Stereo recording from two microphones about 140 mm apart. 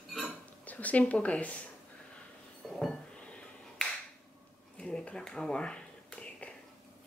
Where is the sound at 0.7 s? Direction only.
10° left (ahead or behind).